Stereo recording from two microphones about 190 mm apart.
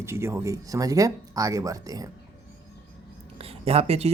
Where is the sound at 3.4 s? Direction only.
30° right (ahead or behind).